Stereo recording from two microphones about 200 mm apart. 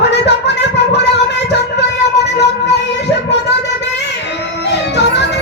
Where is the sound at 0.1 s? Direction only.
60° left (ahead or behind).